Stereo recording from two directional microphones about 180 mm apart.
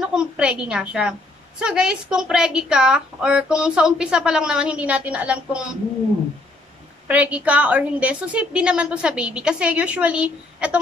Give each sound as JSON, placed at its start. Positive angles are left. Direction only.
{"t": 0.0, "sound": "a woman's voice", "side_deg": -5}
{"t": 7.1, "sound": "a woman's voice", "side_deg": -10}